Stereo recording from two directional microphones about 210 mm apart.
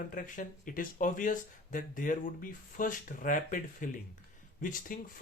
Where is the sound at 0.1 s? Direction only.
40° left (ahead or behind).